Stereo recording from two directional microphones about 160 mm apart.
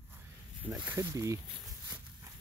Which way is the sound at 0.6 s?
10° right (ahead or behind).